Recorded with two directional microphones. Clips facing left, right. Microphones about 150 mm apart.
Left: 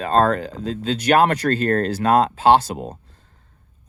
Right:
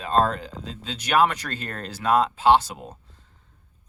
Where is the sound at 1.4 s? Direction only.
40° left (ahead or behind).